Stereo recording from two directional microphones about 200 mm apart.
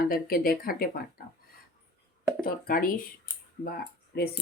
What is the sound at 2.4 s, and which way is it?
Speech, 45° left (ahead or behind).